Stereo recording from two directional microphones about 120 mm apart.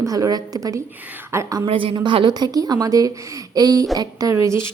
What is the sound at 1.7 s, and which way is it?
A woman's voice, 50° right (ahead or behind).